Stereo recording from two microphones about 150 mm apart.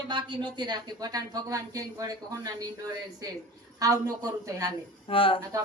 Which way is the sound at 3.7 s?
25° right (ahead or behind).